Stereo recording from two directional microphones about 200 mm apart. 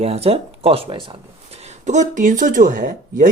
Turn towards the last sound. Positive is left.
turn(degrees=-40)  # may be behind; listen again after turning